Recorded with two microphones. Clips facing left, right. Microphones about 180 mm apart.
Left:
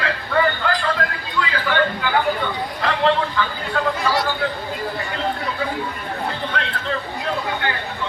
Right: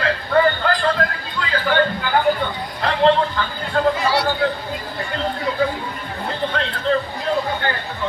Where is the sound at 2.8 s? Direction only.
35° right (ahead or behind).